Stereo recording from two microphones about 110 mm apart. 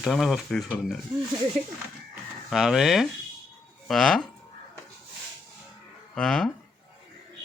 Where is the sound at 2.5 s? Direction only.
Centre (ahead or behind).